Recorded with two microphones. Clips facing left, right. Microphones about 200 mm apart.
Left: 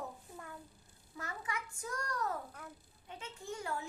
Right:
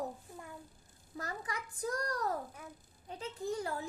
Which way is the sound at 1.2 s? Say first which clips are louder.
Right 2 dB; 35° right (ahead or behind).